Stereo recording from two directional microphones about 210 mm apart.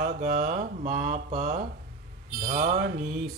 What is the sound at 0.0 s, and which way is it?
Mantra, 35° right (ahead or behind).